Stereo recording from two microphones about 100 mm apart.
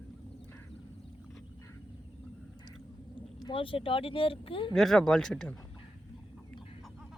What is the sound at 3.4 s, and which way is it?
Speech, 60° left (ahead or behind).